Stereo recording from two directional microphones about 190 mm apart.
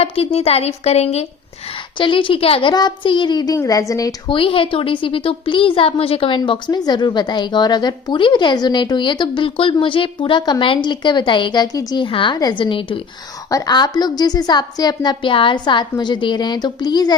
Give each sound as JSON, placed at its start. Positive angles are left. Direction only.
{"t": 0.0, "sound": "a woman's voice", "side_deg": 30}